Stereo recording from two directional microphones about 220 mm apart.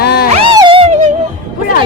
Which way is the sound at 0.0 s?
45° left (ahead or behind).